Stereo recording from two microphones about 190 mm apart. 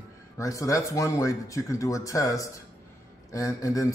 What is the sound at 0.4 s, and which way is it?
Speech, 15° left (ahead or behind).